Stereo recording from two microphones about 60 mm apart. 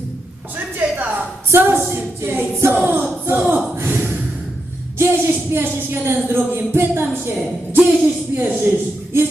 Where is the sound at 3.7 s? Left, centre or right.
Right.